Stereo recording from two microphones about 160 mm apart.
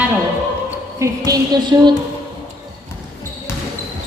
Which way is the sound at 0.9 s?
20° right (ahead or behind).